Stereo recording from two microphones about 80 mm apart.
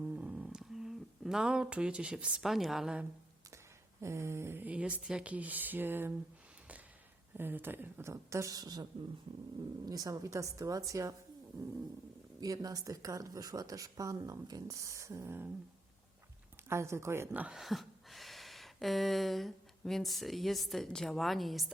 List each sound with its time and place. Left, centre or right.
0.0 s humming: centre
2.4 s a woman's voice: centre
4.0 s a woman's voice: right
4.6 s speech: centre
7.3 s a woman's voice: right
12.4 s speech: right
16.6 s a woman's voice: right
17.5 s a sound: centre